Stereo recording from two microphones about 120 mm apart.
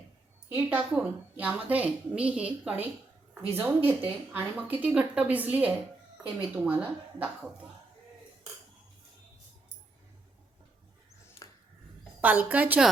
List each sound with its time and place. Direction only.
0.4 s a woman's voice: 15° right (ahead or behind)
12.2 s a woman's voice: 15° right (ahead or behind)